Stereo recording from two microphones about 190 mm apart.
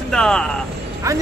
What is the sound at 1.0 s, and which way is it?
Speech, 15° right (ahead or behind).